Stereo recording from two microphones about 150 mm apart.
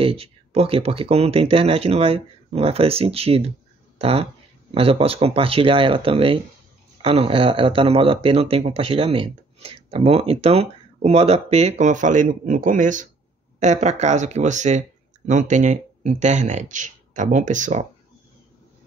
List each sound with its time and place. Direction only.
0.0 s speech: 40° right (ahead or behind)